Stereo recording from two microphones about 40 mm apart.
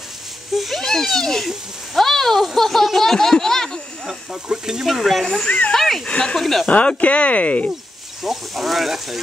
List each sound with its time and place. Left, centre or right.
0.6 s a sound: centre
0.8 s a child's voice: centre
4.1 s speech: centre
4.8 s speech: centre
5.2 s a child's voice: centre
6.0 s speech: left
6.3 s speech: centre
6.7 s speech: left
8.2 s speech: centre